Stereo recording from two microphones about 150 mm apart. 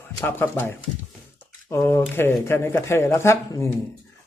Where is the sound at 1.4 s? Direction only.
15° left (ahead or behind).